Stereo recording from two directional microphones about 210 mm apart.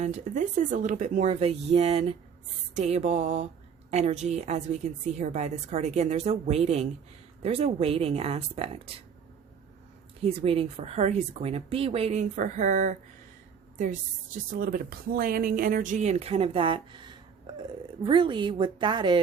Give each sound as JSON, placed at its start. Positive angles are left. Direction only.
{"t": 0.0, "sound": "a woman's voice", "side_deg": -35}
{"t": 10.2, "sound": "speech", "side_deg": -25}
{"t": 14.5, "sound": "speech", "side_deg": -45}